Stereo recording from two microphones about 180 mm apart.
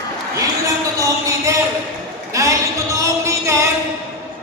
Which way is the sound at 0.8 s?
15° right (ahead or behind).